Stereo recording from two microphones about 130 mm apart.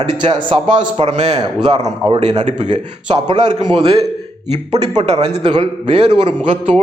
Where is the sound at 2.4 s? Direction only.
65° right (ahead or behind).